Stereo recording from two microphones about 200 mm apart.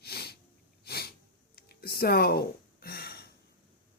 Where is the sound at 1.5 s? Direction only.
50° left (ahead or behind).